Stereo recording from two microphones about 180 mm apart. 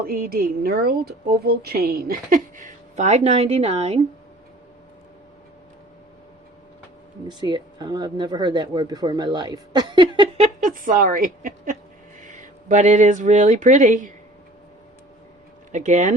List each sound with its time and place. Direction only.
0.0 s speech: 55° right (ahead or behind); by 4.0 s 35° right (ahead or behind)
7.3 s speech: 25° right (ahead or behind); by 14.1 s 45° right (ahead or behind)
15.7 s speech: 40° right (ahead or behind)